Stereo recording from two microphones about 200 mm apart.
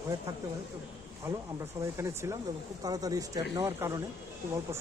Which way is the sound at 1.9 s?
15° right (ahead or behind).